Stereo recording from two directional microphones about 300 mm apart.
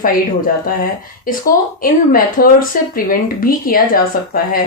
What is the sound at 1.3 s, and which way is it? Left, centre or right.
A woman's voice, left.